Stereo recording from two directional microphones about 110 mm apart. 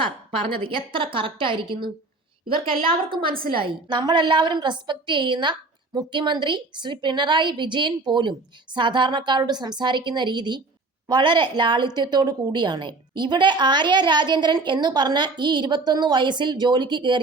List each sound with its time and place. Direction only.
0.6 s a woman's voice: 50° right (ahead or behind)